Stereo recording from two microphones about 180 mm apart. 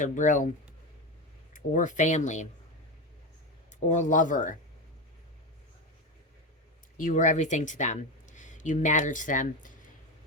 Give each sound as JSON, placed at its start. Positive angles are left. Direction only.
{"t": 0.0, "sound": "speech", "side_deg": 45}
{"t": 1.5, "sound": "speech", "side_deg": 45}
{"t": 3.7, "sound": "speech", "side_deg": 45}
{"t": 6.9, "sound": "speech", "side_deg": 45}